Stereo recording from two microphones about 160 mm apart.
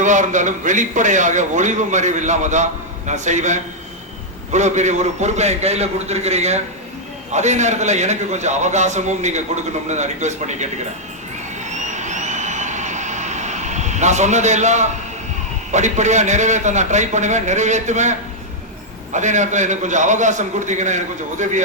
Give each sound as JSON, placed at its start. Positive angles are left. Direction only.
{"t": 0.0, "sound": "a man's voice", "side_deg": -50}
{"t": 11.6, "sound": "vehicle", "side_deg": -50}
{"t": 15.7, "sound": "a man's voice", "side_deg": -50}